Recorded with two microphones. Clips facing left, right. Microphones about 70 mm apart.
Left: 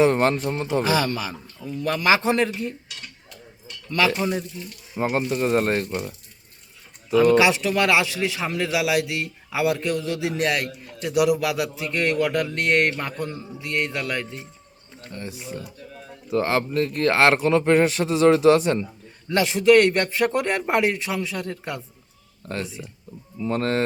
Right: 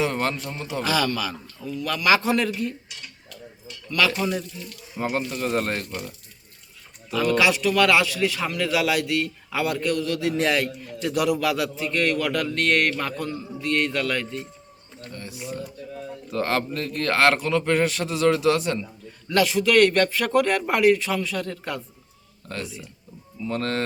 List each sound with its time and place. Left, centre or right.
0.0 s a man's voice: left
3.8 s a man's voice: left
15.1 s a man's voice: left
16.3 s a man's voice: centre